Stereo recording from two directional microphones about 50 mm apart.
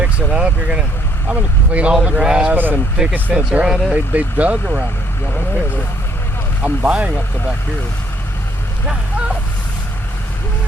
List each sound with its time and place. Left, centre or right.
0.0 s speech: right
2.5 s speech: right
3.1 s speech: right
3.9 s speech: right
6.6 s speech: right
8.9 s speech: right